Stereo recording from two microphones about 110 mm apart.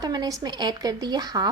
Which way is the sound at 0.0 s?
35° right (ahead or behind).